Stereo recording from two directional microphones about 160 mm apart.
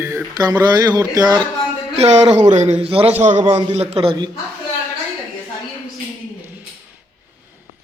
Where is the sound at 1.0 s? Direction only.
25° right (ahead or behind).